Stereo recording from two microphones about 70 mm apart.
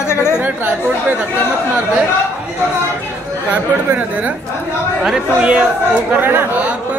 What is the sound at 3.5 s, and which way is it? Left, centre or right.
Speech, right.